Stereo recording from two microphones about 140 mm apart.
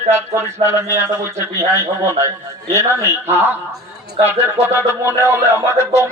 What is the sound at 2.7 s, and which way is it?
Speech, 20° right (ahead or behind).